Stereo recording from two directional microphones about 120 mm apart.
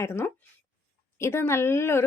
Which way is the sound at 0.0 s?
20° left (ahead or behind).